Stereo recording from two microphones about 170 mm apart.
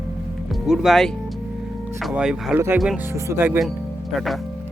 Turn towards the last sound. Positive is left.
turn(degrees=0)  # may be behind; listen again after turning